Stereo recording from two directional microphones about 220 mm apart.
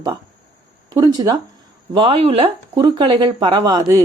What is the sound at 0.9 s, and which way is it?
A woman's voice, 15° right (ahead or behind).